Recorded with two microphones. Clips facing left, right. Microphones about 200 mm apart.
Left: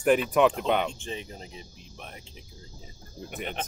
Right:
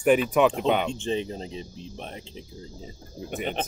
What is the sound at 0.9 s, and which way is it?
Speech, 25° right (ahead or behind).